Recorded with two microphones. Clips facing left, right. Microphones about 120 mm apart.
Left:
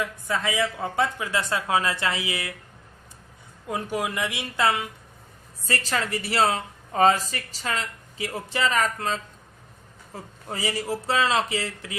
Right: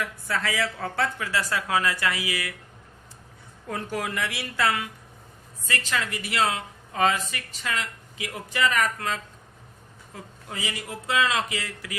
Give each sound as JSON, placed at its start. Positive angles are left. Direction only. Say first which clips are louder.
{"t": 0.0, "sound": "speech", "louder": "left 2 dB", "side_deg": 20}
{"t": 3.7, "sound": "speech", "louder": "left 2 dB", "side_deg": 15}
{"t": 5.6, "sound": "speech", "louder": "left 2 dB", "side_deg": 35}